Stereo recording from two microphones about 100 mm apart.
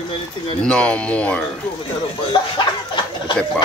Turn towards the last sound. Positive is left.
turn(degrees=55)  # may be behind; listen again after turning